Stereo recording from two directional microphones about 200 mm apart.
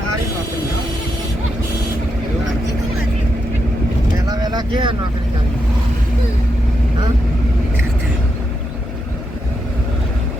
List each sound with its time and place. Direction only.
4.3 s vehicle: 20° right (ahead or behind)